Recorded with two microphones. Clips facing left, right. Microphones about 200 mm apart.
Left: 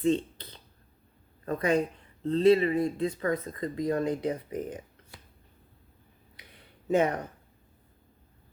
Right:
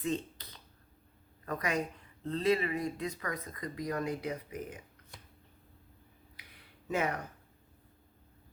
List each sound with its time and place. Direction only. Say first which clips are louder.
0.0 s a sound: left 8 dB; 30° left (ahead or behind)
1.5 s speech: left 8 dB; 30° left (ahead or behind)
6.8 s speech: left 8 dB; 30° left (ahead or behind)